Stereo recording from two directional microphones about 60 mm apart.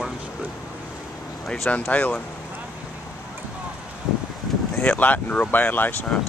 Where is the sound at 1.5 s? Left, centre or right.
Left.